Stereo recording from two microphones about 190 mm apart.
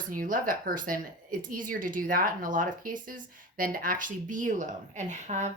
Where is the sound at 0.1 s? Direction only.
45° right (ahead or behind).